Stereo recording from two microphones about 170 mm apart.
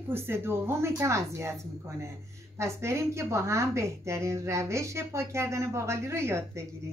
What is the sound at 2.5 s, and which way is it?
A woman's voice, 15° right (ahead or behind).